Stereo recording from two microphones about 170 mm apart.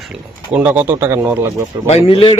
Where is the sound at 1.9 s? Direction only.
35° left (ahead or behind).